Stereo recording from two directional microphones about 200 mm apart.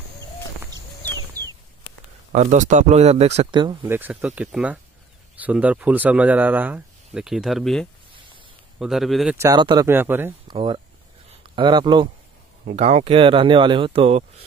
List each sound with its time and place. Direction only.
2.3 s speech: 35° right (ahead or behind)
3.8 s speech: 10° right (ahead or behind)
9.4 s speech: 20° right (ahead or behind)
9.8 s speech: 10° right (ahead or behind)
10.5 s speech: 25° right (ahead or behind)
12.6 s speech: 35° right (ahead or behind)